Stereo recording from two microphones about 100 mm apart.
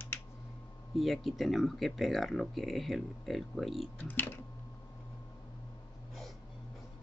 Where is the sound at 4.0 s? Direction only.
20° left (ahead or behind).